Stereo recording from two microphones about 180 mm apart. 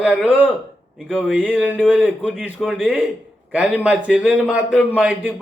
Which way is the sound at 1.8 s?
5° left (ahead or behind).